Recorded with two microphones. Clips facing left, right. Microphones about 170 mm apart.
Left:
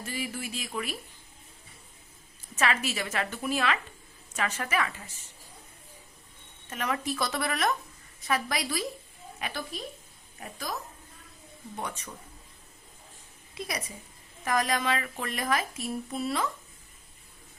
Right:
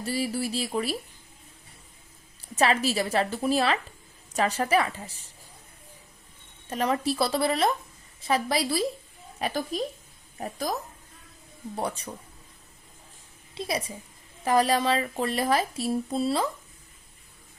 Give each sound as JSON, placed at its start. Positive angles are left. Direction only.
{"t": 0.0, "sound": "speech", "side_deg": -35}
{"t": 2.6, "sound": "speech", "side_deg": -35}
{"t": 6.7, "sound": "speech", "side_deg": -35}
{"t": 11.8, "sound": "speech", "side_deg": -35}
{"t": 13.5, "sound": "a woman's voice", "side_deg": -30}